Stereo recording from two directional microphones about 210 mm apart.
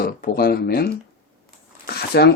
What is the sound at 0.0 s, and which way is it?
Speech, 45° left (ahead or behind).